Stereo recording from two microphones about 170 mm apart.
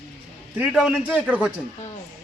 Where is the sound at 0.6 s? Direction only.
5° right (ahead or behind).